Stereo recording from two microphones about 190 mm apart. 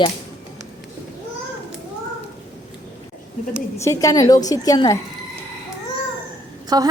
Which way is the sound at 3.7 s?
15° left (ahead or behind).